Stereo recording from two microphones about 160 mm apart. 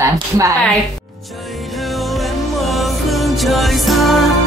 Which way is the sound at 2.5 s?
Centre (ahead or behind).